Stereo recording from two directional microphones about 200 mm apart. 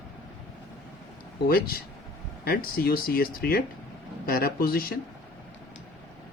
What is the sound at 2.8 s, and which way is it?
Speech, 50° left (ahead or behind).